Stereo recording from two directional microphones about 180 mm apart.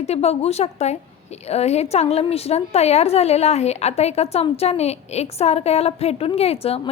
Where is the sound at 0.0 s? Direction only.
35° left (ahead or behind).